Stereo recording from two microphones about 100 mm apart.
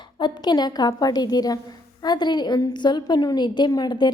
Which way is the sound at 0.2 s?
45° left (ahead or behind).